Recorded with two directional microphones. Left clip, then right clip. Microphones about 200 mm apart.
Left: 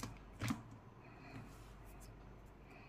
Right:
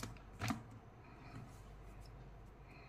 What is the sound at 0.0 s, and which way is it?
Typewriter, 25° right (ahead or behind).